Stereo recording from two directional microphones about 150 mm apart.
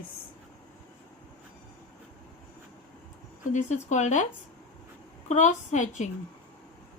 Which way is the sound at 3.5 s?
50° left (ahead or behind).